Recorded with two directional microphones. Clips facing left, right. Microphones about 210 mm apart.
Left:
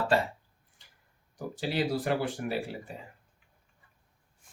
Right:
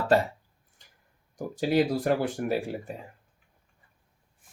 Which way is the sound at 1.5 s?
45° right (ahead or behind).